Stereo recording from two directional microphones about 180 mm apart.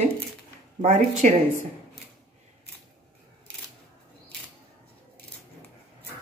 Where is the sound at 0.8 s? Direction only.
40° right (ahead or behind).